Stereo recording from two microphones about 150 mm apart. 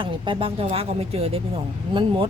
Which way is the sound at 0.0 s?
35° right (ahead or behind).